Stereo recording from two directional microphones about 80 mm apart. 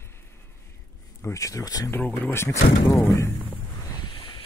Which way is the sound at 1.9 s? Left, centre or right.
Centre.